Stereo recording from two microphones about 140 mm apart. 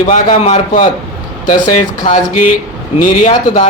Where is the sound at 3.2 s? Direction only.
50° left (ahead or behind).